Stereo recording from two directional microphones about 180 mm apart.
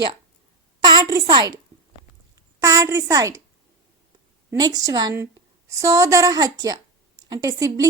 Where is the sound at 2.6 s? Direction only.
15° right (ahead or behind).